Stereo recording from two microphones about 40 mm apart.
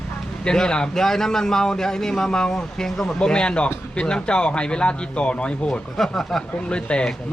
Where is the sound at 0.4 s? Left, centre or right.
Centre.